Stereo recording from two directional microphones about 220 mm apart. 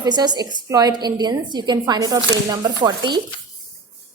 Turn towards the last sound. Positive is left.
turn(degrees=-20)  # may be behind; listen again after turning